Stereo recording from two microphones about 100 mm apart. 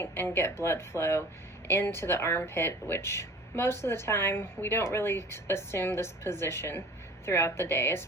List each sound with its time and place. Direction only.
0.0 s speech: 20° left (ahead or behind)